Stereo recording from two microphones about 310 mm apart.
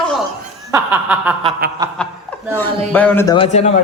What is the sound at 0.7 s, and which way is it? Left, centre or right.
A man's voice, centre.